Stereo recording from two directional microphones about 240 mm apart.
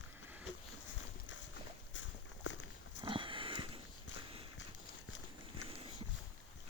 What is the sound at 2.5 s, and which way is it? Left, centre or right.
Walk, left.